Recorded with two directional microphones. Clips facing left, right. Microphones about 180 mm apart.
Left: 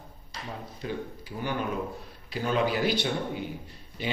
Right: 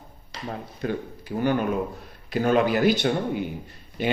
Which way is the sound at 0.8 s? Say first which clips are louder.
Right 6 dB; 55° right (ahead or behind).